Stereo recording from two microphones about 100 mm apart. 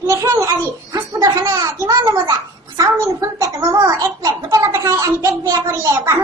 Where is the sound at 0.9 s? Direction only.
35° right (ahead or behind).